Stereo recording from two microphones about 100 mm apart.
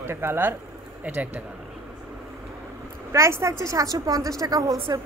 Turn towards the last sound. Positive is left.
turn(degrees=-35)  # may be behind; listen again after turning